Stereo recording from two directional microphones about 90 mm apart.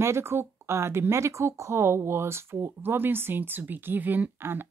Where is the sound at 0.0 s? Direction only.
30° right (ahead or behind).